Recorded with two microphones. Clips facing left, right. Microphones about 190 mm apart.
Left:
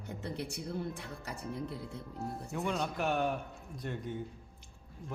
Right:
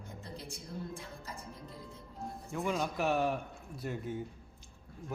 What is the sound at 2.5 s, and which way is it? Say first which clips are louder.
A man's voice: right 2 dB; centre (ahead or behind).